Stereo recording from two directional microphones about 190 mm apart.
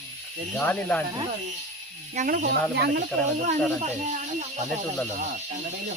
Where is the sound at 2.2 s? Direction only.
45° right (ahead or behind).